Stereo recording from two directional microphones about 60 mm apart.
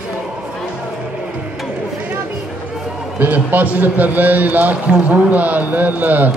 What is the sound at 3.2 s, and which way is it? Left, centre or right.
Speech, right.